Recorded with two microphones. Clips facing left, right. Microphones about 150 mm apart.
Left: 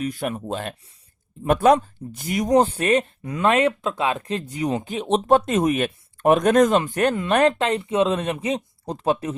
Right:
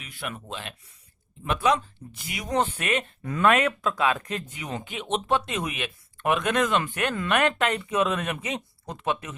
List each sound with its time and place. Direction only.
0.0 s speech: 40° left (ahead or behind)
3.2 s speech: 20° left (ahead or behind)